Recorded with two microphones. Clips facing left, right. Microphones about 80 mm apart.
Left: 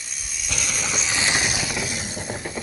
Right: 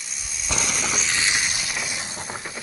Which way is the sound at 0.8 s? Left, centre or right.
Centre.